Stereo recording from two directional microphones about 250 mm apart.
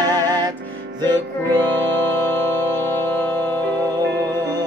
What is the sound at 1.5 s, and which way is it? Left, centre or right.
Music, centre.